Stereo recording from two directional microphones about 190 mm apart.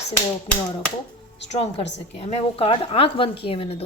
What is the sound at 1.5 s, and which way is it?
A woman's voice, 30° left (ahead or behind).